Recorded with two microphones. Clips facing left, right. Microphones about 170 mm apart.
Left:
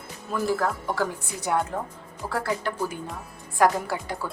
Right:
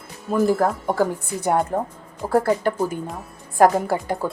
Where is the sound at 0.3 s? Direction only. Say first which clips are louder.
Right 7 dB; 45° right (ahead or behind).